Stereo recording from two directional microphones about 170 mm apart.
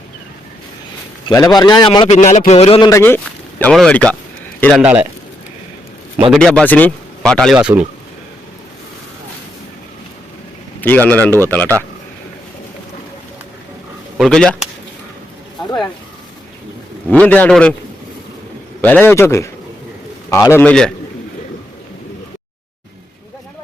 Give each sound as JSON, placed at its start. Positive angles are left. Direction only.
{"t": 1.3, "sound": "a man's voice", "side_deg": 20}
{"t": 2.0, "sound": "a man's voice", "side_deg": 40}
{"t": 2.9, "sound": "speech", "side_deg": 15}
{"t": 6.3, "sound": "speech", "side_deg": 5}
{"t": 10.8, "sound": "a man's voice", "side_deg": 10}
{"t": 14.2, "sound": "speech", "side_deg": 5}
{"t": 17.1, "sound": "a man's voice", "side_deg": 10}
{"t": 18.8, "sound": "a man's voice", "side_deg": 10}